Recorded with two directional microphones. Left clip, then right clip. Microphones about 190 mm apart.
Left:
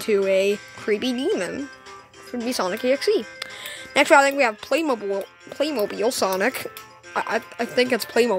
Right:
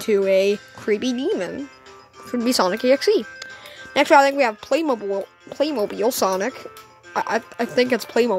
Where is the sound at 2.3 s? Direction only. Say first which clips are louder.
Right 5 dB; 30° right (ahead or behind).